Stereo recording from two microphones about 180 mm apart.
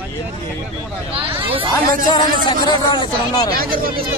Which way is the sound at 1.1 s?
30° right (ahead or behind).